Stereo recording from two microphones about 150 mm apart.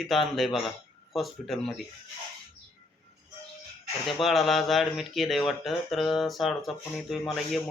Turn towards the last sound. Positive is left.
turn(degrees=0)  # may be behind; listen again after turning